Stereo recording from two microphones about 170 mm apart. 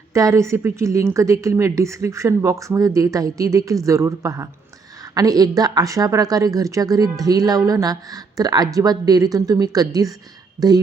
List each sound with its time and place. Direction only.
0.1 s a woman's voice: 20° right (ahead or behind)